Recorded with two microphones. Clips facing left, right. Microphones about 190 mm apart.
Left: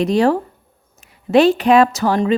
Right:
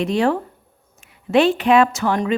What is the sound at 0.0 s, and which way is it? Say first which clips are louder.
Speech: left 4 dB; 40° left (ahead or behind).